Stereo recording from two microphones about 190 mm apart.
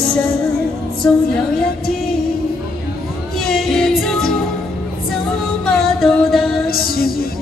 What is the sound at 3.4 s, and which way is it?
Music, centre (ahead or behind).